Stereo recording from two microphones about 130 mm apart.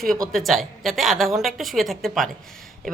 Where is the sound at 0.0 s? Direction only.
5° left (ahead or behind).